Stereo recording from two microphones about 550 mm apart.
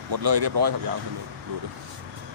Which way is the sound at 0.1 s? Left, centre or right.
Right.